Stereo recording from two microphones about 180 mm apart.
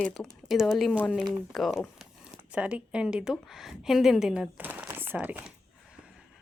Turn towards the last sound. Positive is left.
turn(degrees=-10)  # may be behind; listen again after turning